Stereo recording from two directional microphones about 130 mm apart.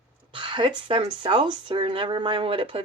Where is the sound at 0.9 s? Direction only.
40° right (ahead or behind).